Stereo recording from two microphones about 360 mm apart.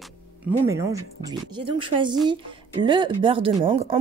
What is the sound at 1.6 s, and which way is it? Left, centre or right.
Speech, centre.